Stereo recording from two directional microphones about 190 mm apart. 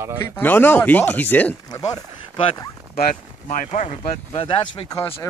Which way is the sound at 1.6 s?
20° left (ahead or behind).